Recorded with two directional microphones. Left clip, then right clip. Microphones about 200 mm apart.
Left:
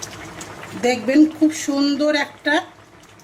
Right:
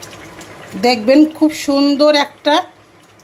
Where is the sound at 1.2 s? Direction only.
20° right (ahead or behind).